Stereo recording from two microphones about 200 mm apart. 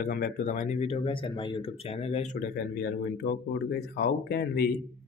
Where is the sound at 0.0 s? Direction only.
45° left (ahead or behind).